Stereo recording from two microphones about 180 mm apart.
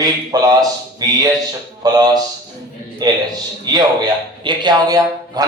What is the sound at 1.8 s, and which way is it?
Speech, 20° right (ahead or behind).